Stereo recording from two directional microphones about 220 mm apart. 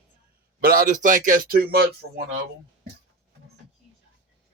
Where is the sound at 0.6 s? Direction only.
40° right (ahead or behind).